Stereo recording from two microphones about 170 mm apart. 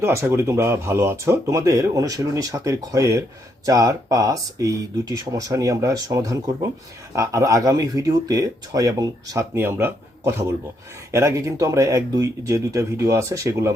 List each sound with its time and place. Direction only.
0.0 s speech: 15° right (ahead or behind)